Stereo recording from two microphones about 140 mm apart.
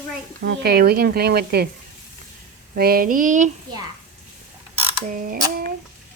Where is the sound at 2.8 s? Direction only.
90° right; by 3.5 s 70° right (ahead or behind).